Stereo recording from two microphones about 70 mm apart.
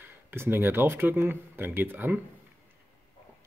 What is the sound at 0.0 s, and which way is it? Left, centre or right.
Speech, right.